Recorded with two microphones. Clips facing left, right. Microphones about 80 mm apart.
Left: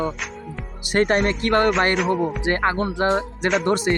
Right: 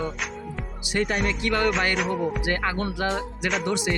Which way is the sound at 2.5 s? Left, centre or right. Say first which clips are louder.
Left 5 dB; left.